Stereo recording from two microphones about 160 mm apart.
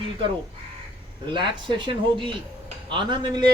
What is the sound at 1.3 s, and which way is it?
Speech, 30° right (ahead or behind).